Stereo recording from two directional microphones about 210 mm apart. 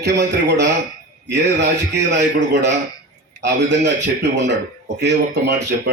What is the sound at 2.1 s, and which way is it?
A man's voice, 55° right (ahead or behind).